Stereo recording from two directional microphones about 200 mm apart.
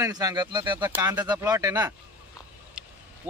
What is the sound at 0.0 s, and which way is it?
Speech, 15° right (ahead or behind).